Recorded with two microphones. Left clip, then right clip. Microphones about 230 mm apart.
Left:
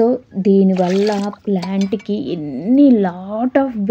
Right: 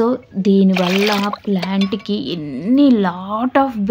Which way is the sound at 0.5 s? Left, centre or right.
Centre.